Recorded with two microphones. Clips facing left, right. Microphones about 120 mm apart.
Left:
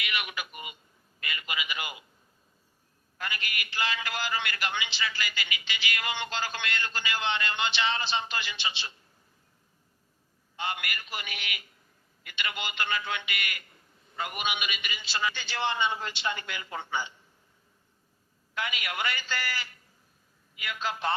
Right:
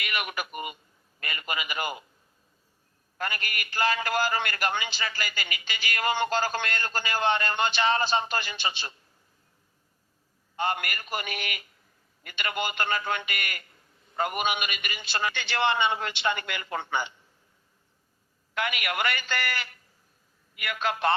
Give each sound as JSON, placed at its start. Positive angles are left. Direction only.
{"t": 0.0, "sound": "a man's voice", "side_deg": -50}
{"t": 3.2, "sound": "a man's voice", "side_deg": -45}
{"t": 10.6, "sound": "a man's voice", "side_deg": -45}
{"t": 18.5, "sound": "a man's voice", "side_deg": -65}